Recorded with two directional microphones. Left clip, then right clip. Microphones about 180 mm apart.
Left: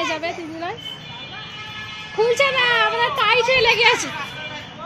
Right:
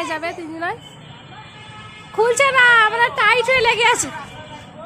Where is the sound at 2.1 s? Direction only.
20° right (ahead or behind).